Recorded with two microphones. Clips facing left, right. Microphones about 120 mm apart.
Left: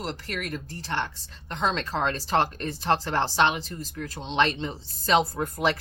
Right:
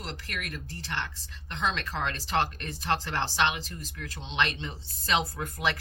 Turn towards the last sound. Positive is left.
turn(degrees=35)  # may be behind; listen again after turning